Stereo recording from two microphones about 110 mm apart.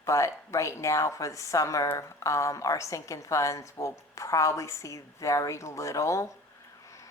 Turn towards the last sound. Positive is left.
turn(degrees=30)  # may be behind; listen again after turning